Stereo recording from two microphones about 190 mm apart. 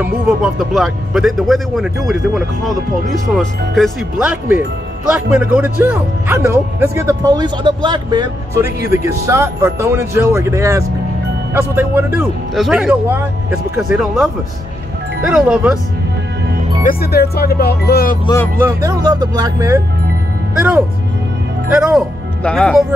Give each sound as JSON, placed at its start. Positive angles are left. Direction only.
{"t": 0.0, "sound": "a man's voice", "side_deg": 0}
{"t": 16.8, "sound": "speech", "side_deg": 55}
{"t": 18.6, "sound": "a man's voice", "side_deg": -15}
{"t": 21.8, "sound": "speech", "side_deg": 0}